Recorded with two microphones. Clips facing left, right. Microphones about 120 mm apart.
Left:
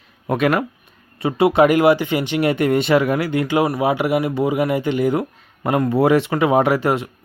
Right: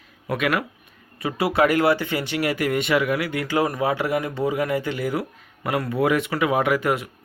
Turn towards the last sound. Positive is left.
turn(degrees=25)  # may be behind; listen again after turning